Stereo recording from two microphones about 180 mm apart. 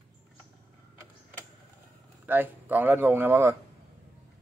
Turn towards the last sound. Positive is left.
turn(degrees=-10)  # may be behind; listen again after turning